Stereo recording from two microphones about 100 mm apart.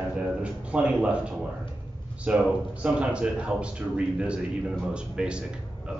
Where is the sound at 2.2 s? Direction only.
10° right (ahead or behind).